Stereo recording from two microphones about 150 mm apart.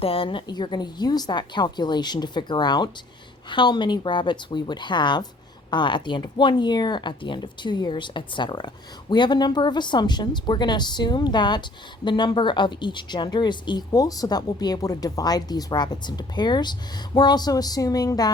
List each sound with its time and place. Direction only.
0.0 s speech: 40° left (ahead or behind)